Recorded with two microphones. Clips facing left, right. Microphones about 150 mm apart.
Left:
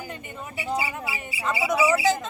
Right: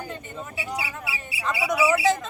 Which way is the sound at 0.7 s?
70° right (ahead or behind).